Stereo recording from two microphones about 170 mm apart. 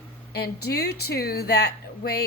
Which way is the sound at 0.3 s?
70° left (ahead or behind).